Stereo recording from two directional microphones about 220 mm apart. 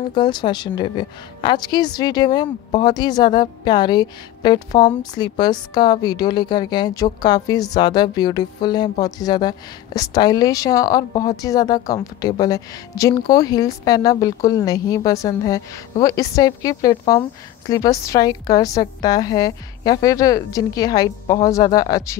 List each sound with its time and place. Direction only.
0.1 s a woman's voice: 20° left (ahead or behind)